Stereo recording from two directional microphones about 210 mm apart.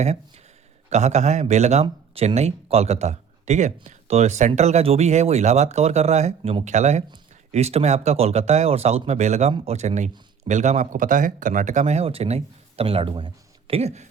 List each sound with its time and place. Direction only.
0.9 s speech: 30° right (ahead or behind)